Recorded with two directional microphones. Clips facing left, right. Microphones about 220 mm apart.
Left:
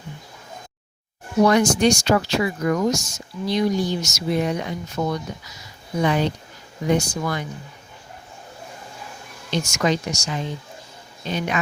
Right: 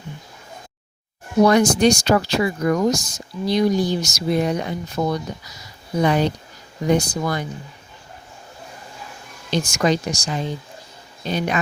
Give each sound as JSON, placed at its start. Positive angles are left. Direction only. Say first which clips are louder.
{"t": 1.5, "sound": "speech", "louder": "right 2 dB", "side_deg": -35}
{"t": 9.5, "sound": "speech", "louder": "right 2 dB", "side_deg": -35}